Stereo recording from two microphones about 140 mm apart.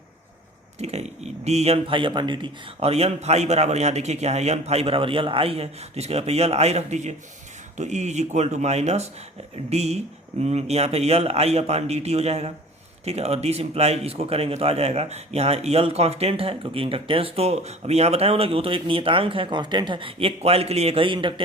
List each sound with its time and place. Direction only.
0.8 s speech: 50° right (ahead or behind); by 2.9 s 35° right (ahead or behind)
2.9 s speech: 50° right (ahead or behind)